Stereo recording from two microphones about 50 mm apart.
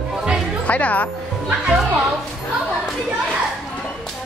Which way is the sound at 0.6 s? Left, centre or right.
Left.